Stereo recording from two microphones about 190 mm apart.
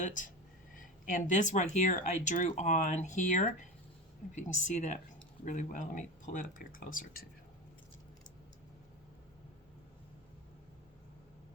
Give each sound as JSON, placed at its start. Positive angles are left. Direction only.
{"t": 0.0, "sound": "speech", "side_deg": 45}